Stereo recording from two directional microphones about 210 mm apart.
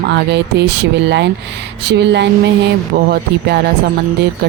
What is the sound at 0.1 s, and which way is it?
Speech, 55° right (ahead or behind).